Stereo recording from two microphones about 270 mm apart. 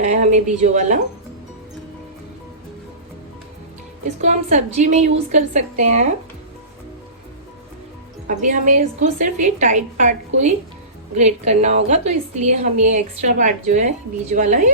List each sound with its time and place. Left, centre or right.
0.0 s a woman's voice: right
4.2 s a woman's voice: right
8.3 s a woman's voice: right